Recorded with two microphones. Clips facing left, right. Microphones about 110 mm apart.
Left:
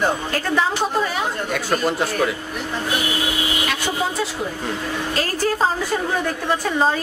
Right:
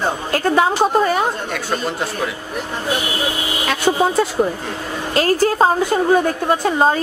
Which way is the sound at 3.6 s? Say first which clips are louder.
Right 10 dB; 50° right (ahead or behind).